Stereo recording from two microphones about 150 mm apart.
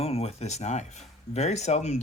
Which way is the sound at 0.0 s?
45° left (ahead or behind).